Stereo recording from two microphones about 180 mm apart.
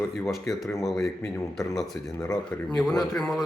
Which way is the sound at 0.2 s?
Centre (ahead or behind).